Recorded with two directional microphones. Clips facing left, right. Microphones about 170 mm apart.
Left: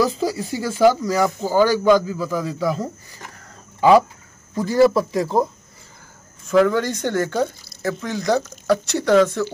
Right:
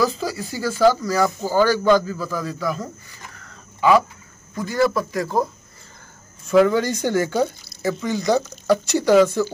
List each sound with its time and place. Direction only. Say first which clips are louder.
0.0 s speech: left 2 dB; 25° left (ahead or behind)
4.6 s speech: left 5 dB; 30° left (ahead or behind)
6.4 s speech: right 1 dB; centre (ahead or behind)